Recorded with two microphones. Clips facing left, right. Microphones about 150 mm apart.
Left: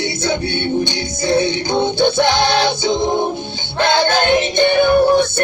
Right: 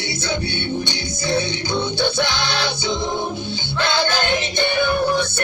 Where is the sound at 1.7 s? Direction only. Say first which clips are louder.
Left 6 dB; 50° left (ahead or behind).